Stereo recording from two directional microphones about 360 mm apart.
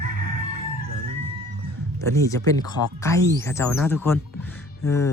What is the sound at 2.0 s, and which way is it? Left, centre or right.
Speech, centre.